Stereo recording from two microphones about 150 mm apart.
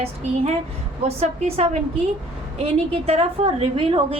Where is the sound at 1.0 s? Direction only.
45° right (ahead or behind).